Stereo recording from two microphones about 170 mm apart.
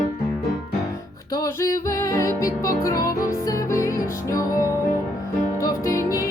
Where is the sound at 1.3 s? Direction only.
20° left (ahead or behind).